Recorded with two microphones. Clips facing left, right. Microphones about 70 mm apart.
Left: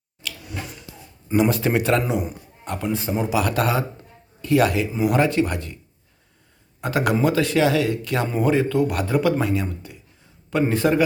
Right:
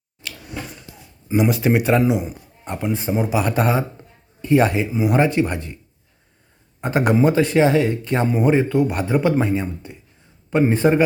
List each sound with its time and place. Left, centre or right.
0.2 s a sound: right
1.4 s a man's voice: centre
6.8 s a man's voice: right